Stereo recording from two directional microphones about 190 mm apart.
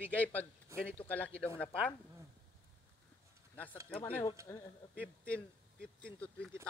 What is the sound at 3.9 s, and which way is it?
Speech, 10° left (ahead or behind).